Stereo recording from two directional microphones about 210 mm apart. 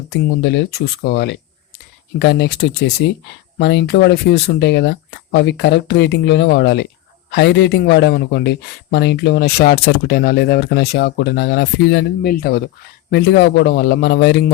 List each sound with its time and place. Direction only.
0.1 s speech: 55° left (ahead or behind)